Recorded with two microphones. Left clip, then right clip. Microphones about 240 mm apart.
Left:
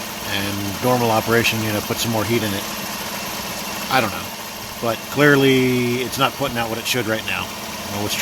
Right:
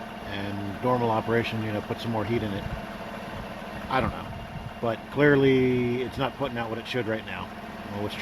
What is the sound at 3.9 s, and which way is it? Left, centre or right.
Speech, centre.